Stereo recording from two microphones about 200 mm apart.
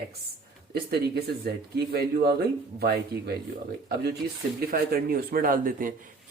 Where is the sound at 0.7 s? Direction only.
55° right (ahead or behind).